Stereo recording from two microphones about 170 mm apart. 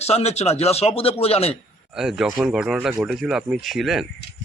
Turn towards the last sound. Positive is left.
turn(degrees=0)  # may be behind; listen again after turning